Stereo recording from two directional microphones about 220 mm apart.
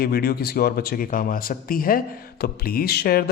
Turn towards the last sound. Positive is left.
turn(degrees=45)  # may be behind; listen again after turning